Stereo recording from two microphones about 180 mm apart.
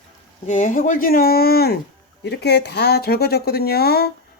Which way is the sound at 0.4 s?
45° left (ahead or behind).